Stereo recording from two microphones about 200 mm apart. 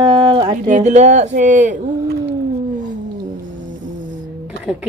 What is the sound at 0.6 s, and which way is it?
Speech, 40° right (ahead or behind).